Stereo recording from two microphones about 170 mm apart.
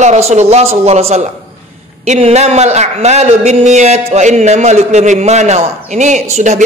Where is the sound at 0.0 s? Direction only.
40° right (ahead or behind).